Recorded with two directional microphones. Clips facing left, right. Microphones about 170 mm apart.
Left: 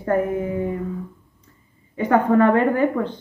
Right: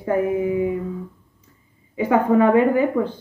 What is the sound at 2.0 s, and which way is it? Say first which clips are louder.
A woman's voice: even; 10° right (ahead or behind).